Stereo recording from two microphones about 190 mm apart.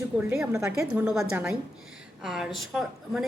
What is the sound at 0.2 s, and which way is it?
A woman's voice, 10° right (ahead or behind).